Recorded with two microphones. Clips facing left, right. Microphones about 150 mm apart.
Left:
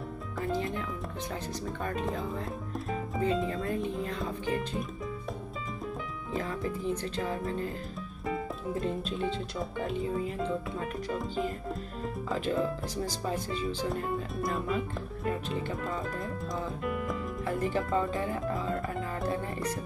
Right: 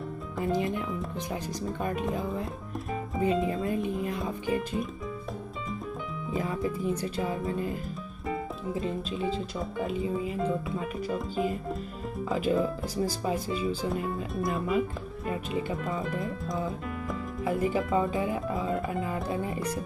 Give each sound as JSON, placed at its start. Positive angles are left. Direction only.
{"t": 0.4, "sound": "music", "side_deg": -15}
{"t": 1.3, "sound": "speech", "side_deg": -15}
{"t": 6.3, "sound": "speech", "side_deg": -10}
{"t": 8.7, "sound": "speech", "side_deg": 0}
{"t": 15.9, "sound": "speech", "side_deg": 0}